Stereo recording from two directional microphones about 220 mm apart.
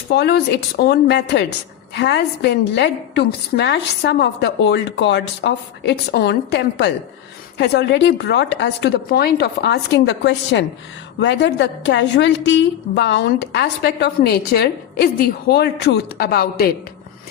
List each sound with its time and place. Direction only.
0.1 s a woman's voice: 45° left (ahead or behind)